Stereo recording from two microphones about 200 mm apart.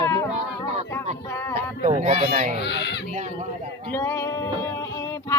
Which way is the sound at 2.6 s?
60° left (ahead or behind).